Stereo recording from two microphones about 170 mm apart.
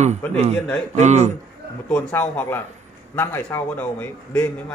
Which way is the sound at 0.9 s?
40° right (ahead or behind).